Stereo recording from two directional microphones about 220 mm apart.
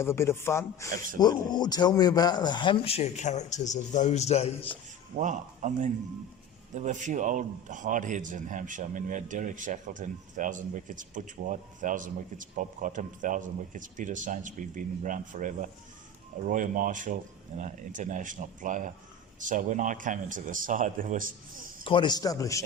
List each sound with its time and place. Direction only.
0.0 s a man's voice: 10° left (ahead or behind)
5.1 s a man's voice: 35° right (ahead or behind)
21.8 s speech: 20° left (ahead or behind)